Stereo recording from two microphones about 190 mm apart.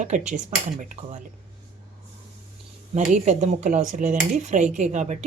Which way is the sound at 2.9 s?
35° right (ahead or behind).